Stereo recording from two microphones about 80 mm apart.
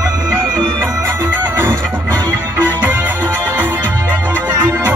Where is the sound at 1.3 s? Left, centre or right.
Right.